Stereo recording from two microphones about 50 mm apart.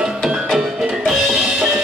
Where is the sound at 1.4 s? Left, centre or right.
Right.